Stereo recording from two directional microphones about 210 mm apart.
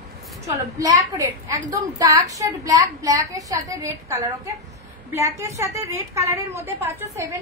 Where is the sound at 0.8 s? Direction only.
15° right (ahead or behind).